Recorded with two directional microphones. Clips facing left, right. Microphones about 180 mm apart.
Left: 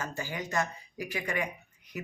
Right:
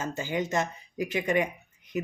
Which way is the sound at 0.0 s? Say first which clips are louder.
Right 6 dB; 20° right (ahead or behind).